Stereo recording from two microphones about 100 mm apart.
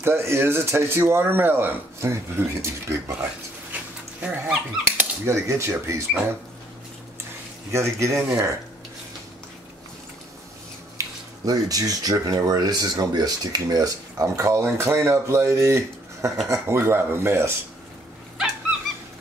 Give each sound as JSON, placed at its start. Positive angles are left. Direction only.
{"t": 0.0, "sound": "speech", "side_deg": -25}
{"t": 4.2, "sound": "speech", "side_deg": -10}
{"t": 5.2, "sound": "speech", "side_deg": -30}
{"t": 7.7, "sound": "speech", "side_deg": -30}
{"t": 11.0, "sound": "speech", "side_deg": -35}